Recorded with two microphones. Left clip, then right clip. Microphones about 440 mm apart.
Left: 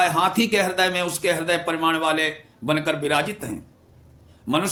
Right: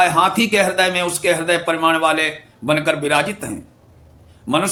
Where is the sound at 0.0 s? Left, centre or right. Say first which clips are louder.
Right 5 dB; left.